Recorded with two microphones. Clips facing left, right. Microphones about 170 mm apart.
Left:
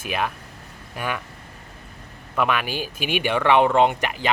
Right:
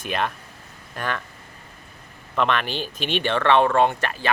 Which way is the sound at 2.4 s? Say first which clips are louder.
Even; 10° left (ahead or behind).